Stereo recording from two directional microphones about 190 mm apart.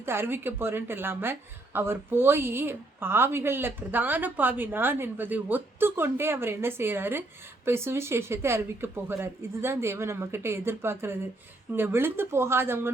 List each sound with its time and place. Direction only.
0.0 s a woman's voice: 10° right (ahead or behind)